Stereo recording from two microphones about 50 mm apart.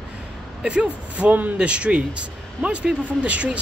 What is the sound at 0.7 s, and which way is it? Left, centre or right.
Speech, centre.